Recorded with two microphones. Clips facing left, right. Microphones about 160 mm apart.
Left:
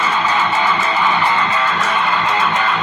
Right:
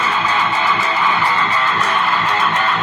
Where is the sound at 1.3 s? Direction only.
20° left (ahead or behind).